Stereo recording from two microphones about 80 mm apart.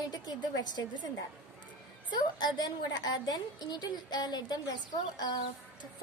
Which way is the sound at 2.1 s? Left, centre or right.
Left.